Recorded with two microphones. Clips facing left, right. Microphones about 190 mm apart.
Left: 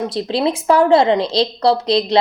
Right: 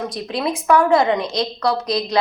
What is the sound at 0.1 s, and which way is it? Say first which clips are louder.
Speech: left 5 dB; 30° left (ahead or behind).